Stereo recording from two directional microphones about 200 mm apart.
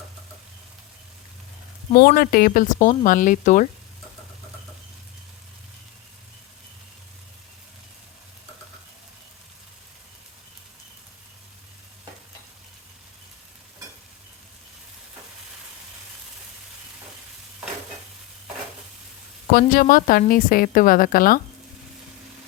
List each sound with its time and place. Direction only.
2.0 s speech: 50° left (ahead or behind)
19.5 s a woman's voice: 45° left (ahead or behind)